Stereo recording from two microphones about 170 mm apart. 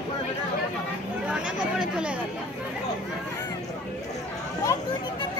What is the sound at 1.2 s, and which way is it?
Chatter, 5° right (ahead or behind).